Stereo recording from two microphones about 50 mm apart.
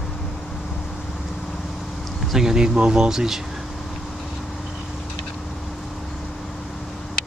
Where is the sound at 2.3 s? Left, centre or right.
Centre.